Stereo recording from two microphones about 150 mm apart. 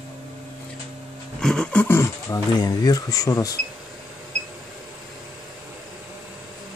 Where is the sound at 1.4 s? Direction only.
5° left (ahead or behind).